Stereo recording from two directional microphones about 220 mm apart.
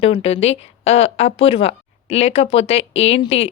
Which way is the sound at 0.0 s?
25° left (ahead or behind).